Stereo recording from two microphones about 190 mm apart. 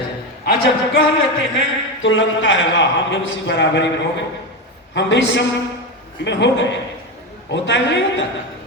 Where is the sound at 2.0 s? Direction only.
80° left.